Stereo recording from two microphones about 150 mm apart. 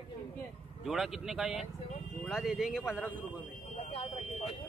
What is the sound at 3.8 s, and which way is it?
Speech, 40° left (ahead or behind).